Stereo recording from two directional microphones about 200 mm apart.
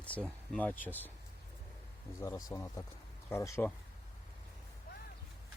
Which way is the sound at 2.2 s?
15° left (ahead or behind).